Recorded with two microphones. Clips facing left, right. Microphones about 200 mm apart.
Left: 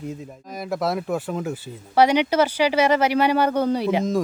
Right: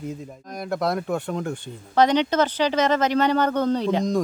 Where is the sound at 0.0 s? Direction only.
Centre (ahead or behind).